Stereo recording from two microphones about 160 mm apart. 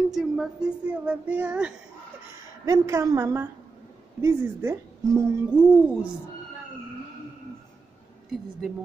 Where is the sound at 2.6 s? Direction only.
20° right (ahead or behind).